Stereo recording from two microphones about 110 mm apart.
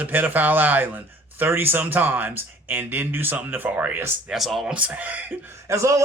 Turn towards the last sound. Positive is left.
turn(degrees=-30)  # may be behind; listen again after turning